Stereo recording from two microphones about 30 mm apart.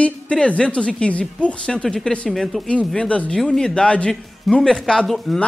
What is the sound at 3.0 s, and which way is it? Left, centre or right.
Speech, left.